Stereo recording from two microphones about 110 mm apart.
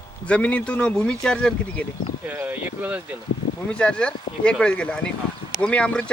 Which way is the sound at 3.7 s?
10° left (ahead or behind).